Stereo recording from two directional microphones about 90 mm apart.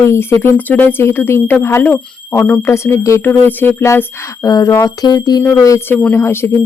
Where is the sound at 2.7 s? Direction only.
30° left (ahead or behind).